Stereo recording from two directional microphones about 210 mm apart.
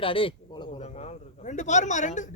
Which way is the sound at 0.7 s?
30° left (ahead or behind).